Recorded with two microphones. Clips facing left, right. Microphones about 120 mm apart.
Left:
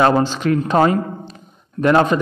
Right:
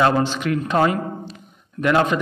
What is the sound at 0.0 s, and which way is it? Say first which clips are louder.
A man's voice: left 3 dB; 35° left (ahead or behind).